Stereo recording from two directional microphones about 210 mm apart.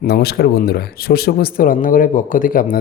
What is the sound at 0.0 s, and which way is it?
Speech, 50° left (ahead or behind).